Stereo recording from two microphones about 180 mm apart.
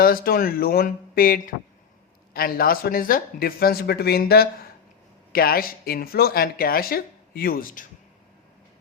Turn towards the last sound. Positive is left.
turn(degrees=50)  # may be behind; listen again after turning